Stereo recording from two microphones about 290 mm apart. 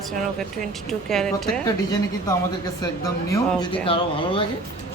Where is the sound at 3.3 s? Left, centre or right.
Centre.